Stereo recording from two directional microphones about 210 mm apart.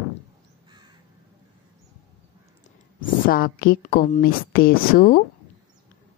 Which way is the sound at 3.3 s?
45° left (ahead or behind).